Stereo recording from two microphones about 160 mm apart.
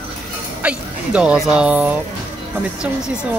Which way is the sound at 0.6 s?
5° right (ahead or behind).